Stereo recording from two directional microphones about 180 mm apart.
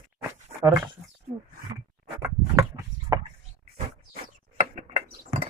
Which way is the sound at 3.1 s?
20° right (ahead or behind).